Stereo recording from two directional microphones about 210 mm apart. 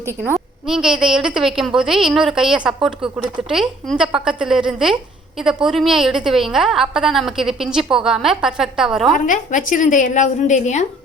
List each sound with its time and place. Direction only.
0.7 s a woman's voice: 5° right (ahead or behind)
9.1 s a woman's voice: 40° left (ahead or behind)